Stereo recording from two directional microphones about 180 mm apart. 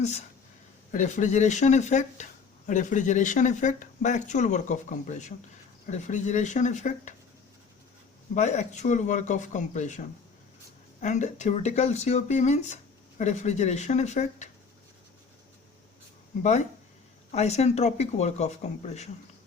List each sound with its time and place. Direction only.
0.0 s speech: 35° left (ahead or behind)
8.4 s speech: 40° left (ahead or behind)
16.4 s speech: 40° left (ahead or behind)